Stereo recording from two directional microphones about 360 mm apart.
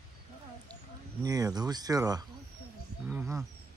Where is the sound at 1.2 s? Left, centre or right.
Centre.